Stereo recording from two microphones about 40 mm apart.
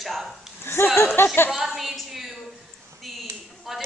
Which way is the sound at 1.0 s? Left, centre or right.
Left.